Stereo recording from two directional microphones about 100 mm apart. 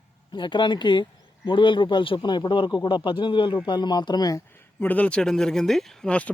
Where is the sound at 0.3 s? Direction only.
50° left (ahead or behind).